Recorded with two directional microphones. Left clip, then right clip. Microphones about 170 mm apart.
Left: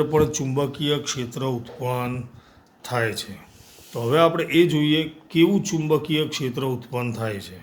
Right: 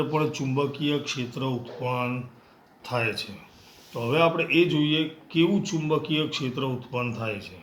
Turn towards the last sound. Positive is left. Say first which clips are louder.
# left 2 dB
turn(degrees=70)  # may be behind; listen again after turning